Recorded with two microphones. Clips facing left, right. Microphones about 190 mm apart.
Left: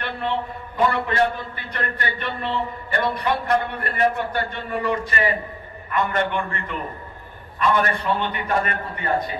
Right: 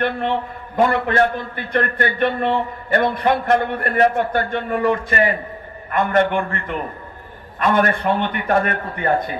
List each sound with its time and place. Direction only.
0.7 s a man's voice: 50° right (ahead or behind)